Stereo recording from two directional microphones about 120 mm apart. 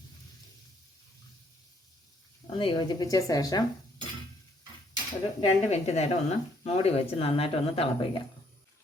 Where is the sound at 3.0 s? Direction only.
30° left (ahead or behind).